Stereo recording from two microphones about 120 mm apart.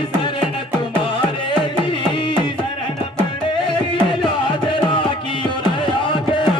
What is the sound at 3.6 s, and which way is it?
Music, 45° left (ahead or behind).